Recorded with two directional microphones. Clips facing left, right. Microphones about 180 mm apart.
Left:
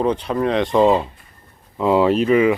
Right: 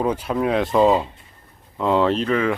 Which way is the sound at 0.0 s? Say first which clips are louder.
Left 2 dB; 5° right (ahead or behind).